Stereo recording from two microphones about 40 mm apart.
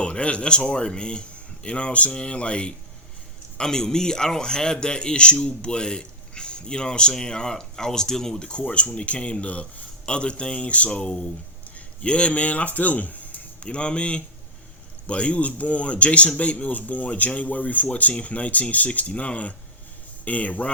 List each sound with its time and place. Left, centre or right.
0.0 s a man's voice: left
3.6 s a man's voice: centre; by 13.7 s left
13.7 s a man's voice: left